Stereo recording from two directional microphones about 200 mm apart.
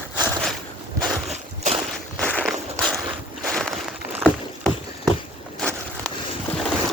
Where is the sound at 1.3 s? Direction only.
35° right (ahead or behind).